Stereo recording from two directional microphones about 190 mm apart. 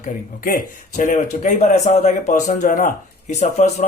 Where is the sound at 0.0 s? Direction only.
45° left (ahead or behind).